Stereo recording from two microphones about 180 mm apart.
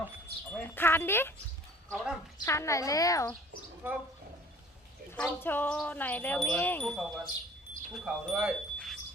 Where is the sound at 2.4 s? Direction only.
15° left (ahead or behind).